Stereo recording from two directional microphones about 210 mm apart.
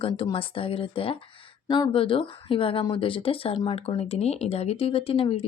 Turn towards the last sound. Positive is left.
turn(degrees=25)  # may be behind; listen again after turning